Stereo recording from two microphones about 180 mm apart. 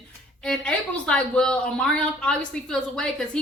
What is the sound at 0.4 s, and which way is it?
Speech, 5° left (ahead or behind).